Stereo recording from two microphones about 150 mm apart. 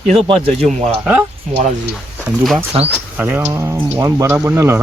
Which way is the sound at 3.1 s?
10° right (ahead or behind).